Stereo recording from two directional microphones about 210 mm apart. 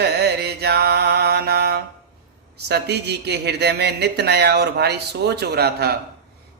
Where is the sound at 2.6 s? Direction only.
50° right (ahead or behind).